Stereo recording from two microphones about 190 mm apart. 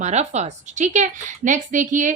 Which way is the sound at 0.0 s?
35° right (ahead or behind).